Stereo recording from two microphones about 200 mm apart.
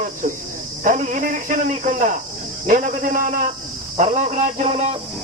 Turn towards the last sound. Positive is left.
turn(degrees=-35)  # may be behind; listen again after turning